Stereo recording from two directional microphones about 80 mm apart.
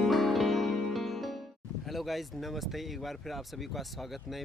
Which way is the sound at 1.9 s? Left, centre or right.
Centre.